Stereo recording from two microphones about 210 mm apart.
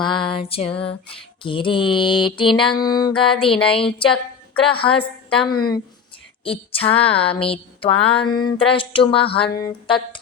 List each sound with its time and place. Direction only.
0.0 s music: 20° left (ahead or behind)
3.9 s a woman's voice: 25° left (ahead or behind)
6.4 s music: 25° left (ahead or behind)